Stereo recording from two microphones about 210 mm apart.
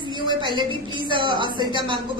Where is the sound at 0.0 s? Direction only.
20° right (ahead or behind).